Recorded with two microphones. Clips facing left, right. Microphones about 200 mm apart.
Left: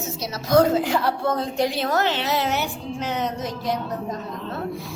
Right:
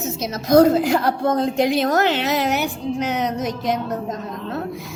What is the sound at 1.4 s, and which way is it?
Speech, 20° right (ahead or behind).